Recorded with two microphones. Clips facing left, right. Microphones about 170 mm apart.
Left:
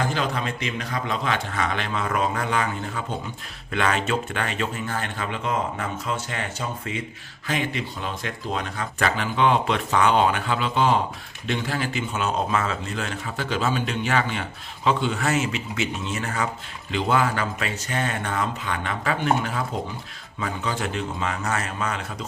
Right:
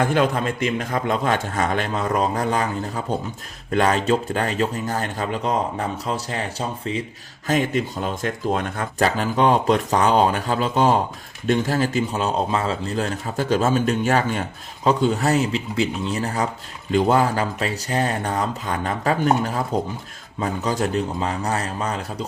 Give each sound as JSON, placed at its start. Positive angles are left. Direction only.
{"t": 0.0, "sound": "a man's voice", "side_deg": -55}
{"t": 7.4, "sound": "a man's voice", "side_deg": -45}
{"t": 9.0, "sound": "speech", "side_deg": -40}